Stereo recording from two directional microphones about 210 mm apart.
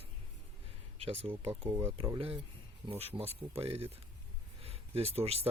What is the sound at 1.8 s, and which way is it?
Speech, 25° right (ahead or behind).